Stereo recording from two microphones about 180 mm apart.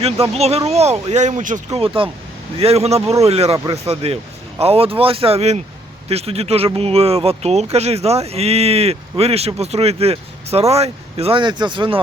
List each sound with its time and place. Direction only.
0.0 s speech: 35° right (ahead or behind)
1.8 s speech: 30° right (ahead or behind)